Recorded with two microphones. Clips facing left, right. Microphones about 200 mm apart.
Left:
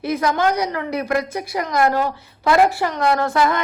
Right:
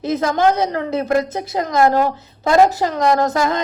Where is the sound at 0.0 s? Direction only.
25° right (ahead or behind).